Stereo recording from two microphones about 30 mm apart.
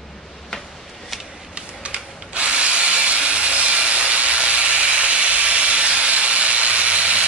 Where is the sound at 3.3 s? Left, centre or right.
Right.